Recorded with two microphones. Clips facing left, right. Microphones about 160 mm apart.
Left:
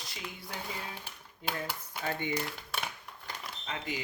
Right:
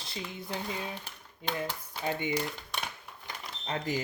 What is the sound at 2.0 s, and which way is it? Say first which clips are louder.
Speech: right 2 dB; 15° right (ahead or behind).